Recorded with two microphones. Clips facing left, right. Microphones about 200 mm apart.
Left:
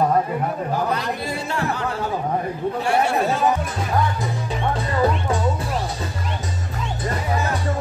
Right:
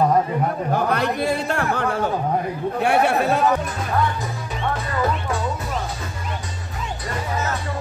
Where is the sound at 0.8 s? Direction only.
60° right (ahead or behind).